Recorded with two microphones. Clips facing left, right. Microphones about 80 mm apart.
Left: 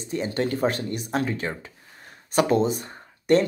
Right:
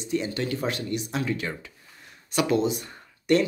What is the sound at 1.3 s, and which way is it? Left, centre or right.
Speech, left.